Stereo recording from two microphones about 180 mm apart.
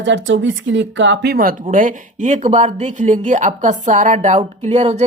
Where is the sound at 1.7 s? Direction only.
45° right (ahead or behind).